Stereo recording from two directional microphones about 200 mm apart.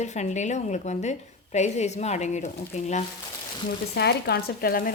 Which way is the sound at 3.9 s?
55° left (ahead or behind).